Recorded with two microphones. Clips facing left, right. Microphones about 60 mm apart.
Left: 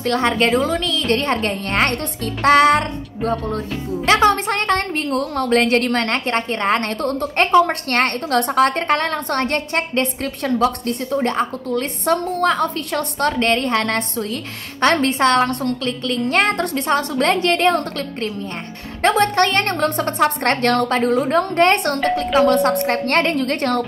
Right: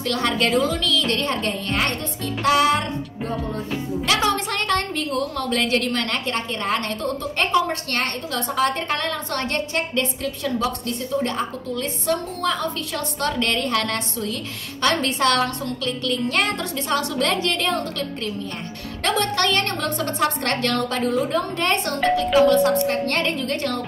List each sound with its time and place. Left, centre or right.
0.0 s a woman's voice: left
4.0 s a woman's voice: left